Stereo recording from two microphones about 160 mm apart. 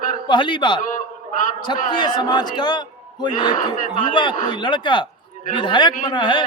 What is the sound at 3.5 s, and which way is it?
Speech, 55° left (ahead or behind).